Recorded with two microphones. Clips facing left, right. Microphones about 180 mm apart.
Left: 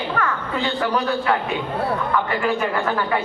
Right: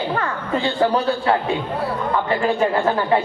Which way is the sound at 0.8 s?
30° right (ahead or behind).